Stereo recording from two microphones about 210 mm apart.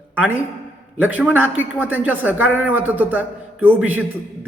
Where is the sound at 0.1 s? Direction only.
10° right (ahead or behind).